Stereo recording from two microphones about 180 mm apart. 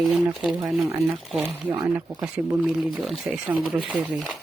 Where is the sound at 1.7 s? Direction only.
20° right (ahead or behind).